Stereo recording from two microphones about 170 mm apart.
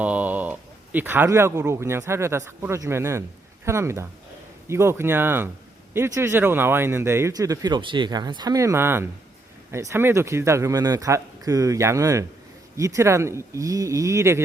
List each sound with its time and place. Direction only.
0.0 s speech: 10° right (ahead or behind)